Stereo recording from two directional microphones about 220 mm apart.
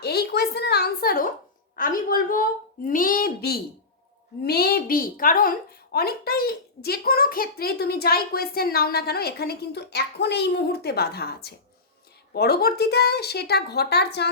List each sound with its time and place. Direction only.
0.0 s a woman's voice: 45° left (ahead or behind)